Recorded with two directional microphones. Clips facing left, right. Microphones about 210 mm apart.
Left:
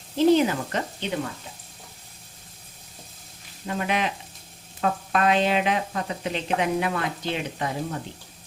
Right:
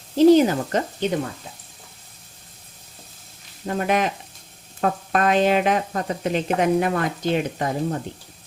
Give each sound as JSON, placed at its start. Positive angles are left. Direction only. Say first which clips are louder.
{"t": 0.3, "sound": "speech", "louder": "right 5 dB", "side_deg": -40}
{"t": 3.7, "sound": "speech", "louder": "right 4 dB", "side_deg": -45}